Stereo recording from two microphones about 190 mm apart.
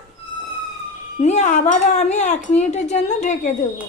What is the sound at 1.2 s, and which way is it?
Speech, 35° left (ahead or behind).